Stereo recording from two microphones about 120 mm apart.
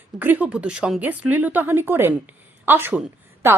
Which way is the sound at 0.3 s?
10° right (ahead or behind).